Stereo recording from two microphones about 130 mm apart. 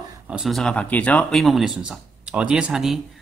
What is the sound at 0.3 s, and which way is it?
Speech, centre (ahead or behind).